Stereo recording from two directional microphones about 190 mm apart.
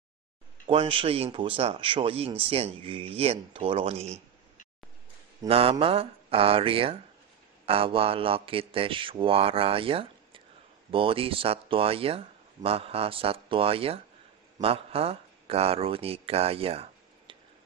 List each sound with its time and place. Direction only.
0.7 s speech: 25° right (ahead or behind)
5.5 s speech: 30° right (ahead or behind)